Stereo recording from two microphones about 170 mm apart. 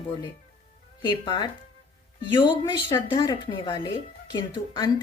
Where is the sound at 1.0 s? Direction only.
25° left (ahead or behind).